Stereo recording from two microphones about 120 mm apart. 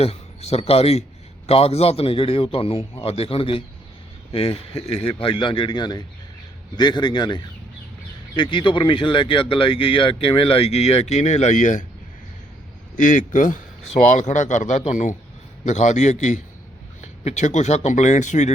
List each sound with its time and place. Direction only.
0.0 s a man's voice: 55° left (ahead or behind); by 11.9 s 90° left
13.0 s a man's voice: 90° left
15.6 s speech: 75° left (ahead or behind)